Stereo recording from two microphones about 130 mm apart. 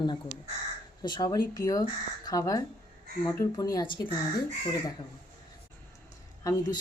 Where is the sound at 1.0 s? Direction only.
35° left (ahead or behind).